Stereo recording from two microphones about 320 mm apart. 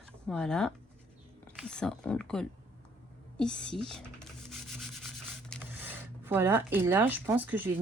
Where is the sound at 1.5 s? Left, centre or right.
Centre.